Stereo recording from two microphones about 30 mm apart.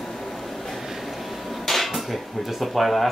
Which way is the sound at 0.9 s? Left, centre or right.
Centre.